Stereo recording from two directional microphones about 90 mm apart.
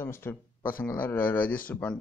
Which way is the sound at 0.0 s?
25° left (ahead or behind).